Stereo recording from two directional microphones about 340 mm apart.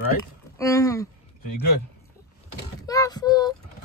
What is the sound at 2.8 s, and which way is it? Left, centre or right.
Speech, centre.